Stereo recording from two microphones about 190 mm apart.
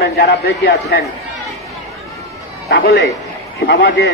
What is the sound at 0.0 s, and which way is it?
A man's voice, 60° left (ahead or behind).